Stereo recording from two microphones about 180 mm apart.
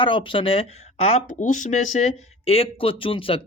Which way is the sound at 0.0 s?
30° left (ahead or behind).